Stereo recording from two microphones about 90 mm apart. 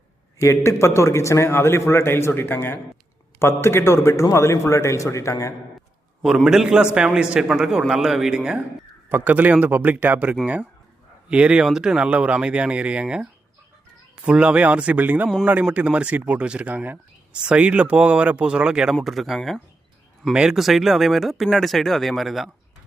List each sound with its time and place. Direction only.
0.3 s a man's voice: 35° left (ahead or behind)
6.2 s speech: 5° right (ahead or behind)
9.0 s speech: 20° right (ahead or behind)
14.3 s speech: 10° right (ahead or behind)